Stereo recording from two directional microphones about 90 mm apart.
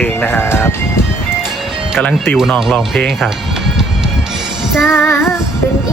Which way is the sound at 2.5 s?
Centre (ahead or behind).